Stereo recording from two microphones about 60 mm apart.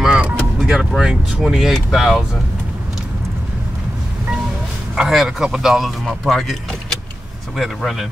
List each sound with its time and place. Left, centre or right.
0.0 s vehicle: centre
0.6 s speech: centre
4.9 s speech: centre